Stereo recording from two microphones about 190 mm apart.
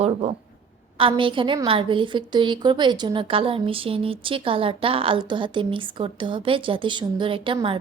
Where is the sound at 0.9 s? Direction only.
25° right (ahead or behind).